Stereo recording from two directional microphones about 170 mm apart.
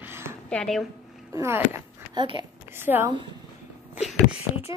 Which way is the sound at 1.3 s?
15° right (ahead or behind).